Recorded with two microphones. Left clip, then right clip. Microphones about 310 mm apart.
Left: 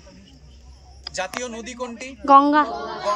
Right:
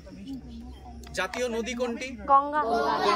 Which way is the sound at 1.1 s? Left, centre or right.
Centre.